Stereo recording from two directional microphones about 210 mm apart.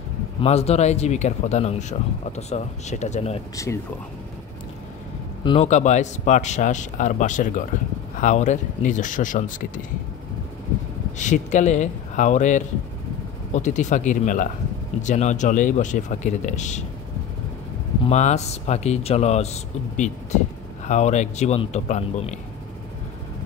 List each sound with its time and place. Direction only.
0.4 s speech: 30° left (ahead or behind)
3.5 s speech: 15° left (ahead or behind)
5.4 s speech: 20° left (ahead or behind)
5.7 s speech: 35° left (ahead or behind)
11.1 s speech: 35° left (ahead or behind)
18.0 s speech: 35° left (ahead or behind)